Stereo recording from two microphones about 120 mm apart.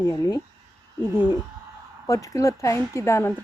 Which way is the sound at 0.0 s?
30° left (ahead or behind).